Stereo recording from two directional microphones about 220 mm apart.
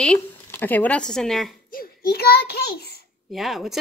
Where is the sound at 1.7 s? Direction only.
45° left (ahead or behind).